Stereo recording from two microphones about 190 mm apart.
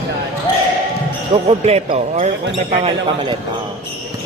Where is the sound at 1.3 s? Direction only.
35° right (ahead or behind).